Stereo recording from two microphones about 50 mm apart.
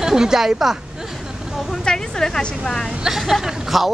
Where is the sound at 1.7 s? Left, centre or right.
Centre.